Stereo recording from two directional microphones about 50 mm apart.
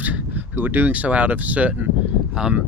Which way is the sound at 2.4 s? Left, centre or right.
Centre.